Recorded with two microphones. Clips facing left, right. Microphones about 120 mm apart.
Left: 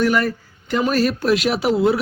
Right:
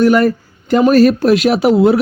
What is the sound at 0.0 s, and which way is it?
Speech, 45° right (ahead or behind).